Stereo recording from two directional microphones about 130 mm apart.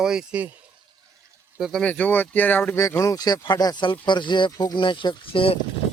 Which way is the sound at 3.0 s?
30° left (ahead or behind).